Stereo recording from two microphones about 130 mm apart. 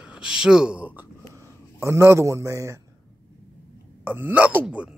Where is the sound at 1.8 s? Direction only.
20° right (ahead or behind).